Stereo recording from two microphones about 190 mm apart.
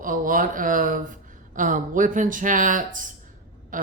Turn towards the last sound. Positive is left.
turn(degrees=-45)  # may be behind; listen again after turning